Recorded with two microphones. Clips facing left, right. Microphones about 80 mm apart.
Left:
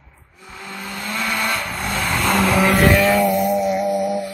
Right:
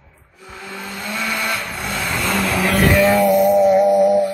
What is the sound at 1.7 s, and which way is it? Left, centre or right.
Vehicle, left.